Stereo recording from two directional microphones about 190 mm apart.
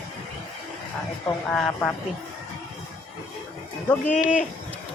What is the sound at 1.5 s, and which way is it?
Speech, 5° left (ahead or behind).